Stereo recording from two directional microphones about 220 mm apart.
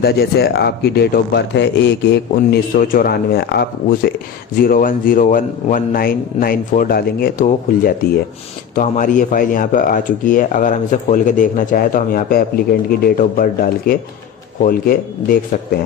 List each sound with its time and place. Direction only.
0.0 s speech: 45° left (ahead or behind)